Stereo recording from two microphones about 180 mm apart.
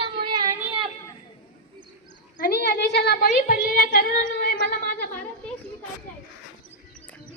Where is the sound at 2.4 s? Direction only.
55° left (ahead or behind).